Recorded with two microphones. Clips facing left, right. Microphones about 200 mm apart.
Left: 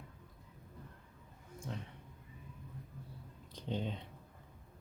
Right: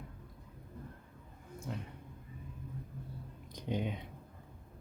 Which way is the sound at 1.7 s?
5° right (ahead or behind).